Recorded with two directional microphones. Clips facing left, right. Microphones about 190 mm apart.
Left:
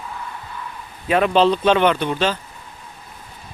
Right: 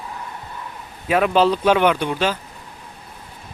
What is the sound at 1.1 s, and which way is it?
Speech, 5° right (ahead or behind).